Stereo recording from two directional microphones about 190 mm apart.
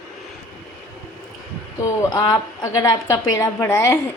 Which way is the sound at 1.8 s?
20° left (ahead or behind).